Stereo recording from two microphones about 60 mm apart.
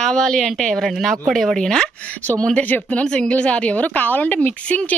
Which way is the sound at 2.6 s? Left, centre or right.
Left.